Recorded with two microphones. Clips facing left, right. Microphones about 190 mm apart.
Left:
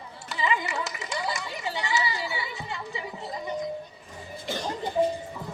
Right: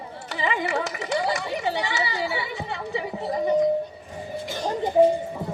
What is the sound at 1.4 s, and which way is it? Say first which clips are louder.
Chatter: right 7 dB; 60° right (ahead or behind).